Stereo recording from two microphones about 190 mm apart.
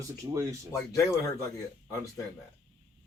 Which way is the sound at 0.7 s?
15° left (ahead or behind).